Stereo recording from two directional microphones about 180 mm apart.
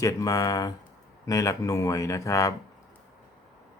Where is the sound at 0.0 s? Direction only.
20° left (ahead or behind).